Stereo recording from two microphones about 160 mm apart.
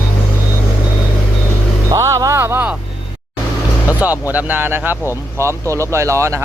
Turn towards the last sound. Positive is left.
turn(degrees=-20)  # may be behind; listen again after turning